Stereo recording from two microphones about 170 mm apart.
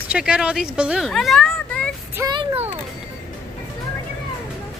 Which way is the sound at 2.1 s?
20° right (ahead or behind).